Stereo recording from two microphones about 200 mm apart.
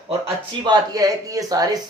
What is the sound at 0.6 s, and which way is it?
Speech, 20° right (ahead or behind).